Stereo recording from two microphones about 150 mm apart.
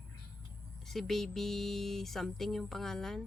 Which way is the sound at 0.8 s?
Centre (ahead or behind).